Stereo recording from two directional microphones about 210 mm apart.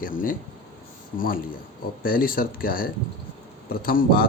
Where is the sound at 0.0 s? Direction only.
40° left (ahead or behind).